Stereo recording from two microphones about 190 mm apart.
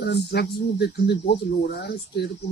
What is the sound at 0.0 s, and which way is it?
Speech, 60° left (ahead or behind).